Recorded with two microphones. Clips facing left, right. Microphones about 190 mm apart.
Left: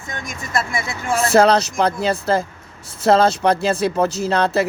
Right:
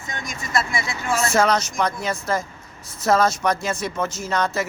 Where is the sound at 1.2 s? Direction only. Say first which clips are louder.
Left 6 dB; 35° left (ahead or behind).